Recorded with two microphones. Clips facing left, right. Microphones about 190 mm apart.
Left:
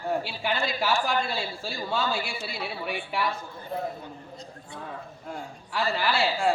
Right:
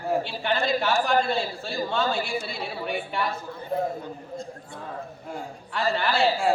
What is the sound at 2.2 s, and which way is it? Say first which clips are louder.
Speech: right 6 dB; 40° right (ahead or behind).